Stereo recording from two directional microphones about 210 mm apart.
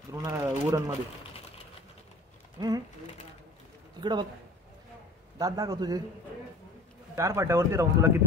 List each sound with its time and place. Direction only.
0.1 s speech: 15° right (ahead or behind)
2.6 s pigeon: 20° right (ahead or behind)
4.0 s a man's voice: 20° right (ahead or behind)
5.4 s speech: 15° right (ahead or behind)
7.2 s speech: 15° right (ahead or behind)